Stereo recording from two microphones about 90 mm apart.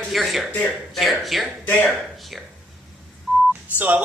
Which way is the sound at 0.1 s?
Centre (ahead or behind).